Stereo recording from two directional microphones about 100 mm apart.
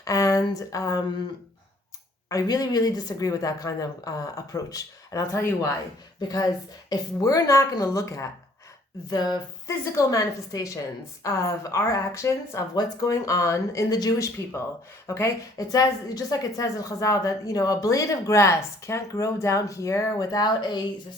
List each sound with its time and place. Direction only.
0.0 s speech: 35° left (ahead or behind)
2.3 s a woman's voice: 40° left (ahead or behind)
6.1 s a woman's voice: 40° left (ahead or behind)
9.0 s a woman's voice: 45° left (ahead or behind)